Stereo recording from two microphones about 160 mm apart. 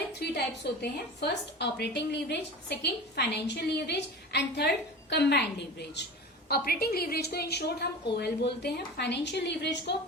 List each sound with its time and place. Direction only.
0.2 s a woman's voice: 90° left
6.5 s a woman's voice: 75° left (ahead or behind); by 9.9 s 90° left